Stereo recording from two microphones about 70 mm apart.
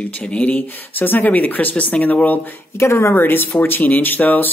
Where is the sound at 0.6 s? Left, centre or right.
Left.